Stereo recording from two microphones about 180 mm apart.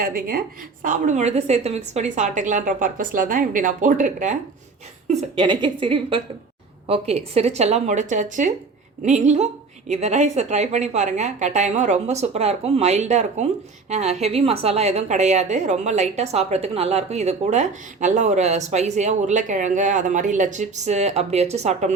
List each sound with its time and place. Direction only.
0.0 s a woman's voice: 50° right (ahead or behind)
5.4 s a woman's voice: 25° right (ahead or behind)